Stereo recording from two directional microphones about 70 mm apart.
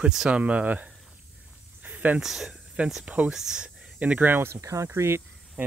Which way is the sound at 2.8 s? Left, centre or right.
Centre.